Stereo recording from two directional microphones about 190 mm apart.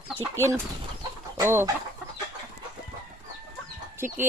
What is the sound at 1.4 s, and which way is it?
Speech, 15° right (ahead or behind).